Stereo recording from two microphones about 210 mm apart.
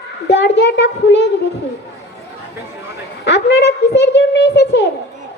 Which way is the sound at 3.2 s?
55° left (ahead or behind).